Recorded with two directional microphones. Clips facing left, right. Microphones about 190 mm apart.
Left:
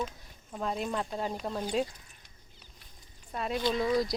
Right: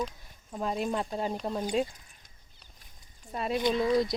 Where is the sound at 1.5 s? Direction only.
15° right (ahead or behind).